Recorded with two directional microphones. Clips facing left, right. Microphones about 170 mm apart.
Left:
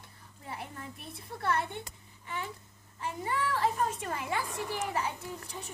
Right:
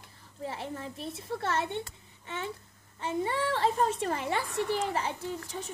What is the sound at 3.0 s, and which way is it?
A child's voice, 30° right (ahead or behind).